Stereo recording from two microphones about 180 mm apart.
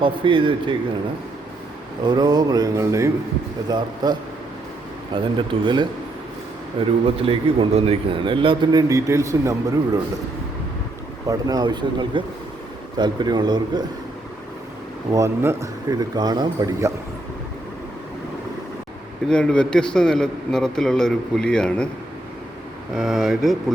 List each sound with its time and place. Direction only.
0.0 s a man's voice: 30° right (ahead or behind)
2.0 s a man's voice: 25° right (ahead or behind)
8.9 s a man's voice: 15° right (ahead or behind)
11.3 s a man's voice: 20° right (ahead or behind)
15.1 s a man's voice: 15° right (ahead or behind)
19.3 s a man's voice: 5° left (ahead or behind)
23.0 s a man's voice: 5° right (ahead or behind)